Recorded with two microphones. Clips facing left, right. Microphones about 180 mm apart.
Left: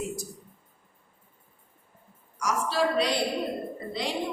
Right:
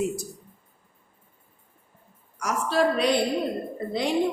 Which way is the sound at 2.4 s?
55° right (ahead or behind).